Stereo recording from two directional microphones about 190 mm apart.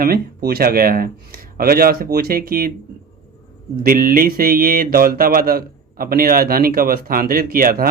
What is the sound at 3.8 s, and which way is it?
A man's voice, 50° right (ahead or behind).